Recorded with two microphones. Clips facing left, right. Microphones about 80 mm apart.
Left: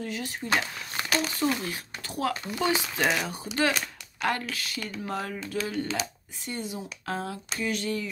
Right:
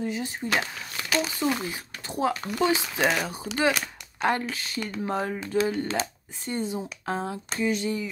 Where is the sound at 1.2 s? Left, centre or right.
Centre.